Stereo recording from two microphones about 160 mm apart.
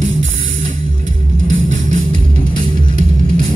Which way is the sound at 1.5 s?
55° right (ahead or behind).